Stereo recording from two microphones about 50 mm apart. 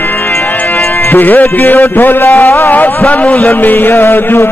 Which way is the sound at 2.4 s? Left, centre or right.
Left.